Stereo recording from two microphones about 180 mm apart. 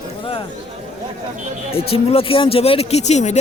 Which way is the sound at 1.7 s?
30° left (ahead or behind).